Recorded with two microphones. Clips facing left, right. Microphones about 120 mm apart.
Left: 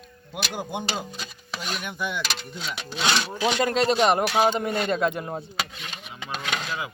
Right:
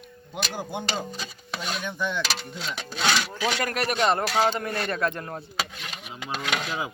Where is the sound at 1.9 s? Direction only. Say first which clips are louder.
Right 2 dB; 10° left (ahead or behind).